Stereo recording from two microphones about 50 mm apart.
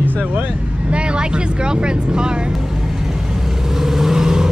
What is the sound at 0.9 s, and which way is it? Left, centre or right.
Vehicle, right.